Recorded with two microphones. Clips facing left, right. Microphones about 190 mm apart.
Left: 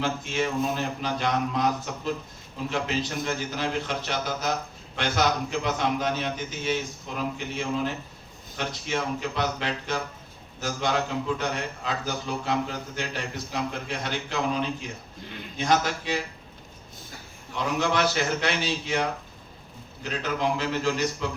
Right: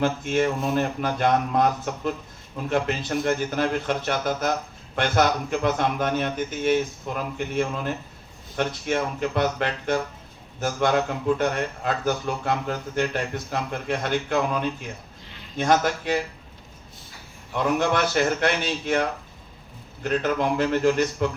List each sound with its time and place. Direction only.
0.0 s a man's voice: 55° right (ahead or behind)
17.5 s a man's voice: 55° right (ahead or behind)